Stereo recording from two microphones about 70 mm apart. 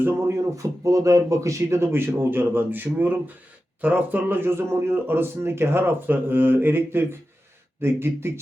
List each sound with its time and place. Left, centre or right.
0.0 s speech: right